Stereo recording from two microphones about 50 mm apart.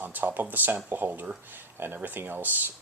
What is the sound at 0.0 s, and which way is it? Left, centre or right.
Speech, right.